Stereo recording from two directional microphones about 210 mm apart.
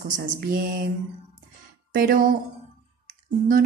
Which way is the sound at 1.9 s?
45° right (ahead or behind).